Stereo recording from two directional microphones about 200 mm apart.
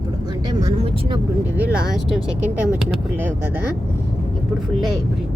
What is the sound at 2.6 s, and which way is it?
Speech, 10° right (ahead or behind).